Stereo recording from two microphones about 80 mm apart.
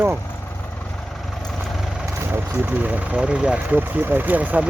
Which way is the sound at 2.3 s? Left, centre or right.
Centre.